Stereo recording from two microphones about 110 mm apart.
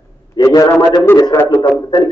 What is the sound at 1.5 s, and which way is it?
Speech, 40° left (ahead or behind).